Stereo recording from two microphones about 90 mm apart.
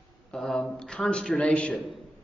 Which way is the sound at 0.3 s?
5° left (ahead or behind).